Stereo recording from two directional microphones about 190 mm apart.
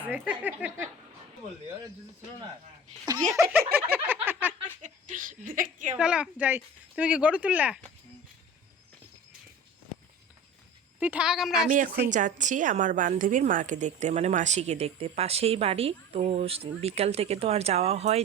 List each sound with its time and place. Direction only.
0.1 s speech: 10° right (ahead or behind)
3.3 s speech: 15° right (ahead or behind)
3.7 s a sound: 10° right (ahead or behind)
4.8 s a woman's voice: 40° right (ahead or behind)
6.0 s speech: 5° right (ahead or behind)
11.0 s a woman's voice: 5° right (ahead or behind)
11.7 s a woman's voice: 45° right (ahead or behind)